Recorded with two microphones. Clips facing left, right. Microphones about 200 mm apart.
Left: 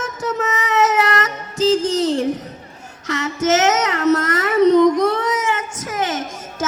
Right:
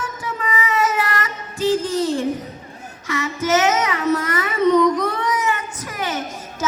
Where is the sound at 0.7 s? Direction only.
45° left (ahead or behind).